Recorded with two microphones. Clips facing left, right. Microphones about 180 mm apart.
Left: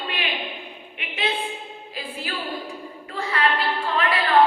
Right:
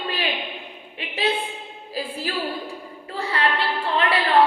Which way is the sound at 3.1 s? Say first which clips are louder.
Even; 30° right (ahead or behind).